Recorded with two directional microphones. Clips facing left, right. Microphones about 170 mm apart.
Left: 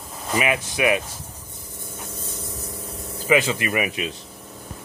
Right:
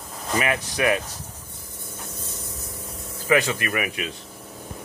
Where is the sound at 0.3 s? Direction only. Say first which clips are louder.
Left 1 dB; 15° left (ahead or behind).